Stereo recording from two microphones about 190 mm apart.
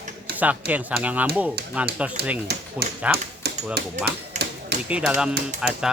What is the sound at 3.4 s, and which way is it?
Typewriter, 60° right (ahead or behind).